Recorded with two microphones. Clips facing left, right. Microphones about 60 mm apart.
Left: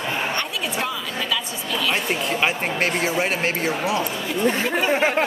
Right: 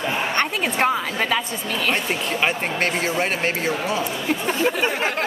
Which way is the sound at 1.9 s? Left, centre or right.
Centre.